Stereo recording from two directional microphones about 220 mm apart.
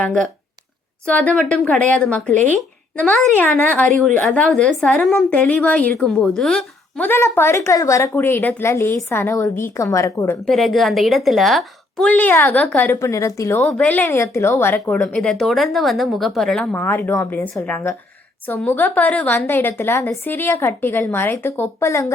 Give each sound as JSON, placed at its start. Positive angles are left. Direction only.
{"t": 0.0, "sound": "a woman's voice", "side_deg": 5}
{"t": 10.4, "sound": "a woman's voice", "side_deg": 0}